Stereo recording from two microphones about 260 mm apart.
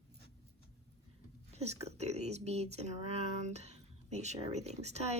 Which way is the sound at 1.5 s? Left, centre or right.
Right.